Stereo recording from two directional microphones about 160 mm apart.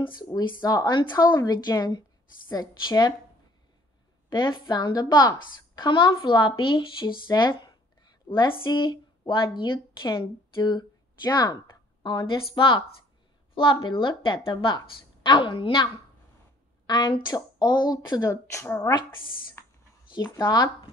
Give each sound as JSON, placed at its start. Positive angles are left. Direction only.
{"t": 0.0, "sound": "speech", "side_deg": 25}
{"t": 4.3, "sound": "a woman's voice", "side_deg": 30}
{"t": 19.6, "sound": "a sound", "side_deg": 15}
{"t": 20.3, "sound": "speech", "side_deg": 25}